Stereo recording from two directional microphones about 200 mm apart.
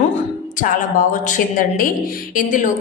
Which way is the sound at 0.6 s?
45° left (ahead or behind).